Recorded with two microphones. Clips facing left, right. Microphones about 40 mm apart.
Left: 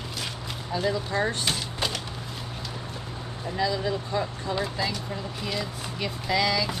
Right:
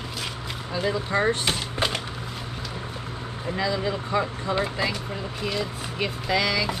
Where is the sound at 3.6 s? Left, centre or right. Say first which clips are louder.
Even; right.